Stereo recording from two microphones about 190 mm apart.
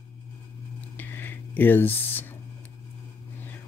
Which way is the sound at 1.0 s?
10° left (ahead or behind).